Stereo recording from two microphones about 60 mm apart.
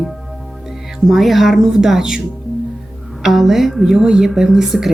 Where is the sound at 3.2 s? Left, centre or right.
Centre.